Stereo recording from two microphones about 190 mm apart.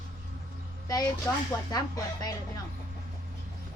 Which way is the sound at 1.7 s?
20° left (ahead or behind).